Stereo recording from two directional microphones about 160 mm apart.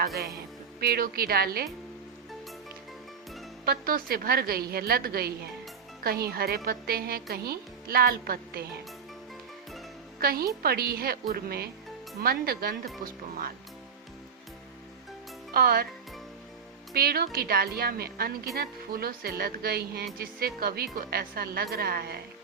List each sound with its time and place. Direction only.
0.8 s a woman's voice: 75° right (ahead or behind)
3.7 s a woman's voice: 70° right (ahead or behind)
10.2 s a woman's voice: 70° right (ahead or behind)
15.5 s a woman's voice: 70° right (ahead or behind)
16.9 s a woman's voice: 75° right (ahead or behind)